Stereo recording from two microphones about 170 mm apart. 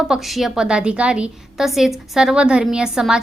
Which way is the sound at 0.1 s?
Centre (ahead or behind).